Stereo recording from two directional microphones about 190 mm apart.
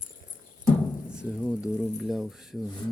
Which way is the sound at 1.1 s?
5° right (ahead or behind).